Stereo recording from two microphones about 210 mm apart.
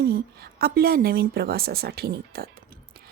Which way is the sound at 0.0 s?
45° right (ahead or behind).